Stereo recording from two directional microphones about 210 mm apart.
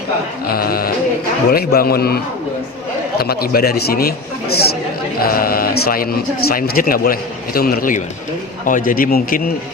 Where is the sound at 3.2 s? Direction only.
45° left (ahead or behind).